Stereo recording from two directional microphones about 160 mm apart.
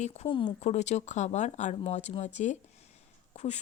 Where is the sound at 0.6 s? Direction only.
45° left (ahead or behind).